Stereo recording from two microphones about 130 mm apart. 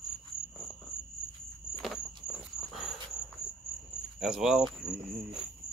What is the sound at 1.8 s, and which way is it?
Walk, centre (ahead or behind).